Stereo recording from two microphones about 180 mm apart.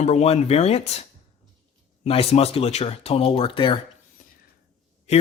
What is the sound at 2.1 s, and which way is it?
Speech, 35° left (ahead or behind).